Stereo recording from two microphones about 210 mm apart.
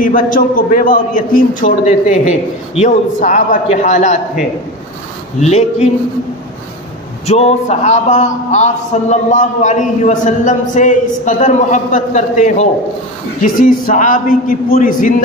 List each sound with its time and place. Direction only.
0.0 s a man's voice: 40° left (ahead or behind)
7.2 s a man's voice: 30° left (ahead or behind)